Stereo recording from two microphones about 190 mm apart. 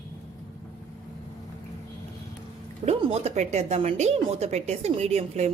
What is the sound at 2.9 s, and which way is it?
A woman's voice, 30° right (ahead or behind).